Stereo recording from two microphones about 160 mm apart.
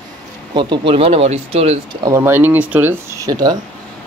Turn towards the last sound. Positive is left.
turn(degrees=-25)  # may be behind; listen again after turning